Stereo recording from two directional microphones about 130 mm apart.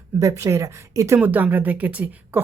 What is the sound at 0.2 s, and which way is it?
Speech, 25° right (ahead or behind).